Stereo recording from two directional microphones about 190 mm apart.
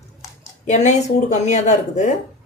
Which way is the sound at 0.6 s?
40° left (ahead or behind).